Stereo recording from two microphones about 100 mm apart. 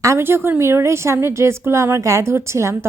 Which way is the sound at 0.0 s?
25° right (ahead or behind).